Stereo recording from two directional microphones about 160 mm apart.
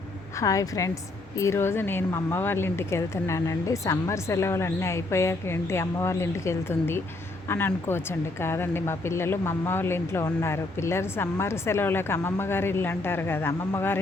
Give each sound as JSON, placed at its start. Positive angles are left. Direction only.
{"t": 0.3, "sound": "a woman's voice", "side_deg": 20}